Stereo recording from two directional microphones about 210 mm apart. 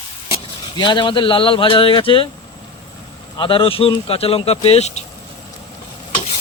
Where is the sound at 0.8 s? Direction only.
20° left (ahead or behind).